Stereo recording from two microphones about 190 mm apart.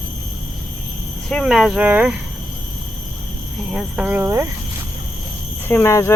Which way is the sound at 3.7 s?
5° right (ahead or behind).